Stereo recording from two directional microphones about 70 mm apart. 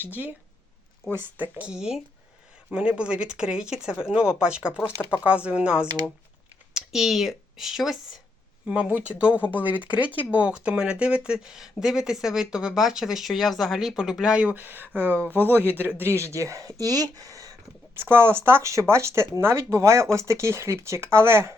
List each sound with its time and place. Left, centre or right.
0.0 s speech: right
1.7 s speech: centre
8.6 s speech: centre; by 17.6 s right
17.9 s speech: right